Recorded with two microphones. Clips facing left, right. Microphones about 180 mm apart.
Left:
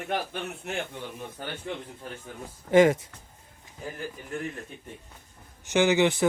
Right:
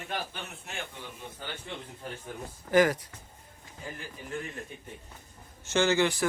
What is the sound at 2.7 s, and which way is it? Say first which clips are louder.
Speech: left 5 dB; 25° left (ahead or behind).